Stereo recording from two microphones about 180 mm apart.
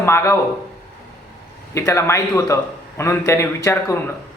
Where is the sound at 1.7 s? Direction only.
15° left (ahead or behind).